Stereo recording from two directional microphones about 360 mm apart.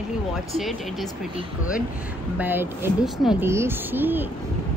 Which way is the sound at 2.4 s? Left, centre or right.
Centre.